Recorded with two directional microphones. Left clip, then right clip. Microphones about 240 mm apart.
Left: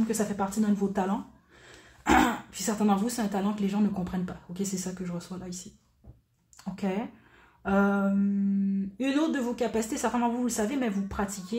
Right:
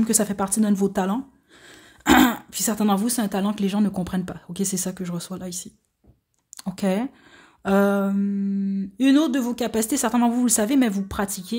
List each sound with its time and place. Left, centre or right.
0.0 s speech: right